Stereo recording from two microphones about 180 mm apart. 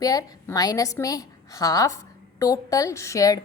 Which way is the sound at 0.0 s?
20° left (ahead or behind).